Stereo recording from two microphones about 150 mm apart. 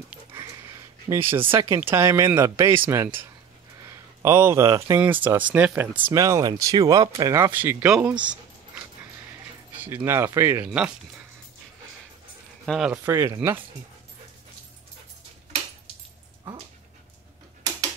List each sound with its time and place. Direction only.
0.3 s a sound: 20° right (ahead or behind)
1.8 s speech: 15° right (ahead or behind)
7.3 s speech: 15° right (ahead or behind)
10.0 s speech: 15° right (ahead or behind)
12.6 s speech: centre (ahead or behind)
12.9 s speech: 15° right (ahead or behind)